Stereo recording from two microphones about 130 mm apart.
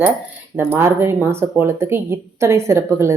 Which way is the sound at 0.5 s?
15° right (ahead or behind).